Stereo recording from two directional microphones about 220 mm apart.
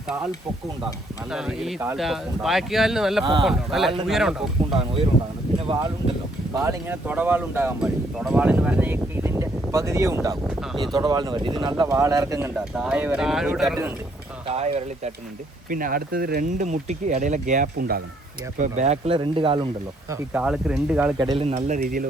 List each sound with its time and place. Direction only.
1.3 s speech: 5° right (ahead or behind)
4.7 s speech: 25° right (ahead or behind)
6.5 s speech: 15° right (ahead or behind)
14.4 s speech: 25° right (ahead or behind)
15.7 s speech: 40° right (ahead or behind); by 19.6 s 25° right (ahead or behind)
20.1 s speech: 5° right (ahead or behind)
21.2 s speech: 20° right (ahead or behind)
21.5 s speech: 35° right (ahead or behind)